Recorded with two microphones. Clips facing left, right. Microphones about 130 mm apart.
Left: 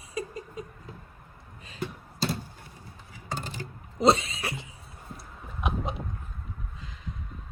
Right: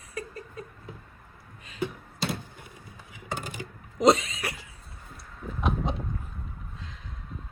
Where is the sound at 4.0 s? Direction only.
30° left (ahead or behind).